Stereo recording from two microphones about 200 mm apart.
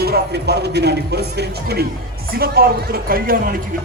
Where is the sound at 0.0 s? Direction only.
55° right (ahead or behind).